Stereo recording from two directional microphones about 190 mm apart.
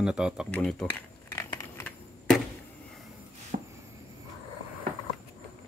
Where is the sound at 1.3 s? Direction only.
15° left (ahead or behind).